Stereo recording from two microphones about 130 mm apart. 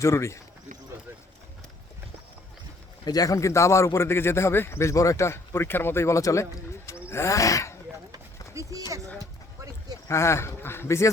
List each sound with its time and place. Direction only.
0.0 s a man's voice: 20° left (ahead or behind)
3.0 s a man's voice: 30° left (ahead or behind)
8.6 s a sound: 25° right (ahead or behind)
10.1 s a man's voice: 20° left (ahead or behind)